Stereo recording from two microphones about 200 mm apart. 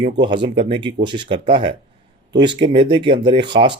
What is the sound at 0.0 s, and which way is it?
Speech, 25° right (ahead or behind).